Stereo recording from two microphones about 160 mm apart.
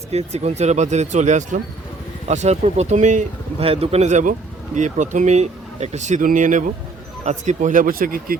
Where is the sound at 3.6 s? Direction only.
35° right (ahead or behind).